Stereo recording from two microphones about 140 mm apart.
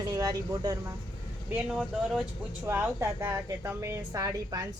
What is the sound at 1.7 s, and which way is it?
Speech, centre (ahead or behind).